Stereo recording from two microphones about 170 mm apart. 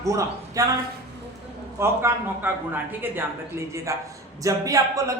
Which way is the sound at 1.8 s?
15° right (ahead or behind).